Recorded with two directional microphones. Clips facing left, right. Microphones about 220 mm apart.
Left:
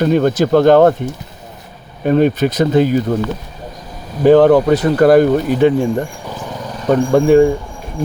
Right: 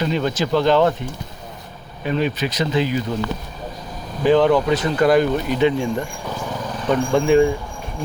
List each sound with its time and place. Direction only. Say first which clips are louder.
0.0 s speech: left 8 dB; 50° left (ahead or behind)
2.0 s speech: left 9 dB; 50° left (ahead or behind)
4.2 s speech: left 7 dB; 50° left (ahead or behind)